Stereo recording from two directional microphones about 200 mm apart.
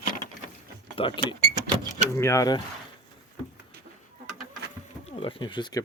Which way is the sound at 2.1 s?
15° left (ahead or behind).